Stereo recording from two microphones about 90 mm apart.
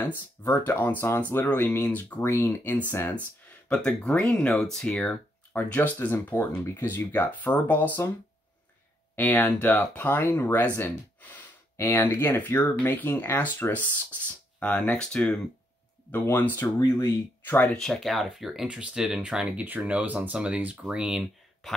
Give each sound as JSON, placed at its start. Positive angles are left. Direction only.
{"t": 0.0, "sound": "speech", "side_deg": 20}
{"t": 2.2, "sound": "speech", "side_deg": 25}
{"t": 3.6, "sound": "speech", "side_deg": 15}
{"t": 9.1, "sound": "speech", "side_deg": 20}
{"t": 11.7, "sound": "speech", "side_deg": 30}
{"t": 16.1, "sound": "speech", "side_deg": 20}
{"t": 17.6, "sound": "speech", "side_deg": 5}